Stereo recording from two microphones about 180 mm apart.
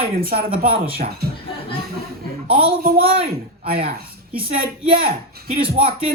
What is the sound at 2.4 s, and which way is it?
Speech, 30° right (ahead or behind).